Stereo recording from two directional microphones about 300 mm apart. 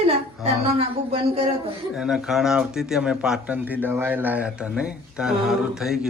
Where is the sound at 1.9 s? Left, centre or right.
Centre.